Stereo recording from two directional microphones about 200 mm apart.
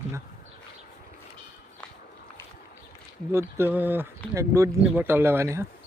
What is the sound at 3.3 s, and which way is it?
Speech, 10° right (ahead or behind).